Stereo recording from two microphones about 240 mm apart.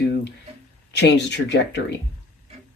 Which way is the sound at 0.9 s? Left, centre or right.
Left.